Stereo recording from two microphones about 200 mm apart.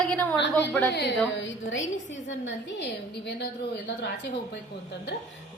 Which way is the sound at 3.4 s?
55° left (ahead or behind).